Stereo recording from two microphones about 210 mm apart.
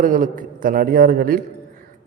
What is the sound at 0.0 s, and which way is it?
A man's voice, 40° right (ahead or behind).